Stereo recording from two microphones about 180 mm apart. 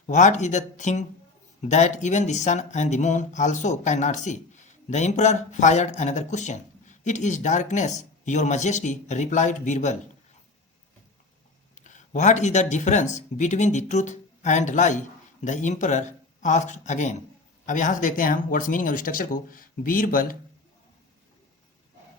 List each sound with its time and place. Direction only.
0.1 s speech: 40° left (ahead or behind)
11.7 s speech: 40° left (ahead or behind)